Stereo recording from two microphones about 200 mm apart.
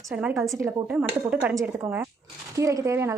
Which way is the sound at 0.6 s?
15° right (ahead or behind).